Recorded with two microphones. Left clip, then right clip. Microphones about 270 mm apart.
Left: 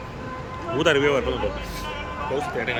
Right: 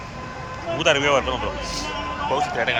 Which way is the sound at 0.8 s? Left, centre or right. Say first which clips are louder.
Right 1 dB; centre.